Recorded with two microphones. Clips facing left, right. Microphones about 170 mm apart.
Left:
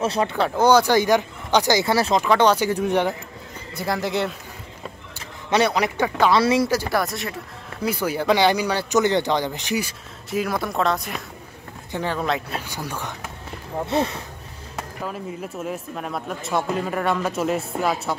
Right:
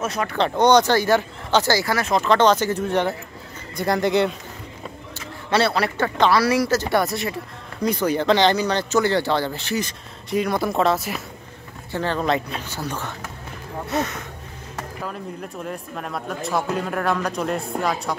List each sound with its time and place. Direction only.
0.0 s speech: 30° left (ahead or behind)
0.4 s speech: 5° left (ahead or behind); by 2.1 s 25° left (ahead or behind)
2.1 s speech: 10° left (ahead or behind)
3.7 s speech: centre (ahead or behind)
5.5 s speech: 15° left (ahead or behind)
6.3 s speech: 25° left (ahead or behind)
6.9 s speech: centre (ahead or behind)
11.9 s speech: 15° left (ahead or behind)
12.2 s speech: 5° left (ahead or behind)
13.8 s speech: 30° left (ahead or behind)
15.0 s speech: 5° left (ahead or behind)